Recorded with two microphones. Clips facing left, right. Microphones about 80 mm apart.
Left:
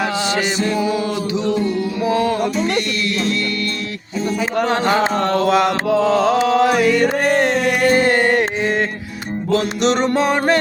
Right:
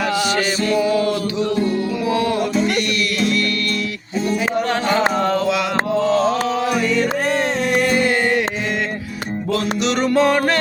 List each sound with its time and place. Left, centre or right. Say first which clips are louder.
0.7 s music: right 2 dB; left
2.0 s music: left 3 dB; left
5.2 s mantra: left 1 dB; centre
5.9 s music: left 1 dB; left
7.9 s music: left 3 dB; left
9.5 s music: left 4 dB; left
10.2 s music: even; centre